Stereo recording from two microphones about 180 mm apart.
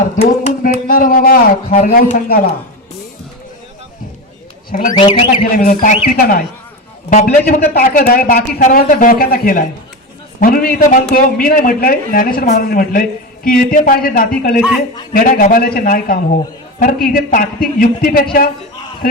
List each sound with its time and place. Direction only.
0.2 s speech: 40° left (ahead or behind)
0.9 s speech: 55° left (ahead or behind)
4.7 s speech: 50° left (ahead or behind)
4.9 s speech: 30° left (ahead or behind)
5.5 s a man's voice: 50° left (ahead or behind)